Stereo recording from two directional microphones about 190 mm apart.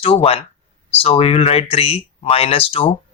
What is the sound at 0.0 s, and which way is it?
Speech, 30° left (ahead or behind).